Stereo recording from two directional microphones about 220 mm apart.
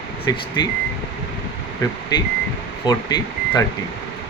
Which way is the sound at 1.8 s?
15° left (ahead or behind).